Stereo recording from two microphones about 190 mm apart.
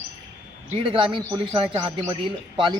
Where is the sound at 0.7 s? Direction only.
25° right (ahead or behind).